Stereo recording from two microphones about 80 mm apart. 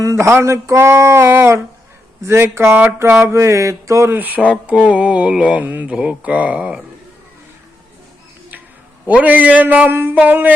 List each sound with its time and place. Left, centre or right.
0.0 s mantra: right
4.1 s a man's voice: right
4.6 s mantra: centre
9.0 s a man's voice: centre